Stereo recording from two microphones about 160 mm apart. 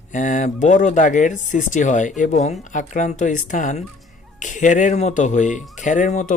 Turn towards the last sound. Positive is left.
turn(degrees=50)  # may be behind; listen again after turning